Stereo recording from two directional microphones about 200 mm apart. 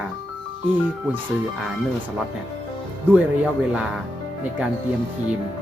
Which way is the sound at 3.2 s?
5° right (ahead or behind).